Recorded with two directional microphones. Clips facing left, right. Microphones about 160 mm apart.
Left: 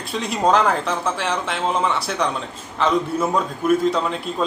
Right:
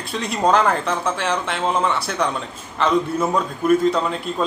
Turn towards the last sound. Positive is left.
turn(degrees=0)  # may be behind; listen again after turning